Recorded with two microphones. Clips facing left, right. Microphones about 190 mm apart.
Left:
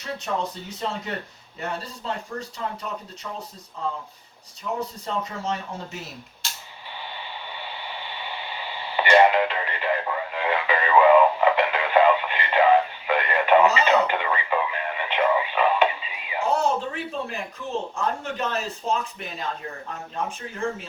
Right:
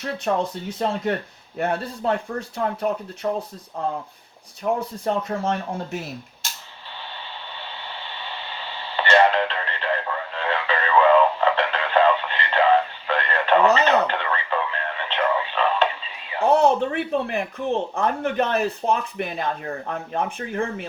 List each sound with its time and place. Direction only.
0.3 s speech: 55° right (ahead or behind)
8.5 s radio: 10° left (ahead or behind)
16.4 s speech: 60° right (ahead or behind)